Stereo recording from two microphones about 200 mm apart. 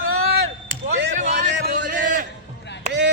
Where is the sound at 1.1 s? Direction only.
40° right (ahead or behind).